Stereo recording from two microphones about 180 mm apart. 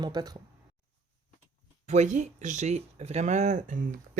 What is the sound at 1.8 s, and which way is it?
Speech, 40° right (ahead or behind).